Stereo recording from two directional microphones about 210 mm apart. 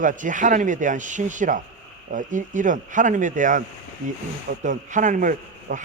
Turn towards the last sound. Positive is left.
turn(degrees=-40)  # may be behind; listen again after turning